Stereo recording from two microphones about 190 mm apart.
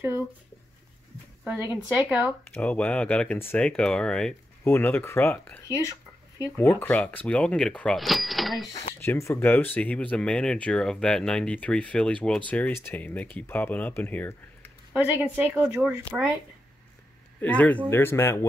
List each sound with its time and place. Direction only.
1.4 s speech: 10° right (ahead or behind)
2.5 s speech: 5° left (ahead or behind)
9.0 s speech: 10° left (ahead or behind)
14.9 s speech: 10° right (ahead or behind)
16.0 s speech: 20° right (ahead or behind)
17.4 s speech: 5° left (ahead or behind)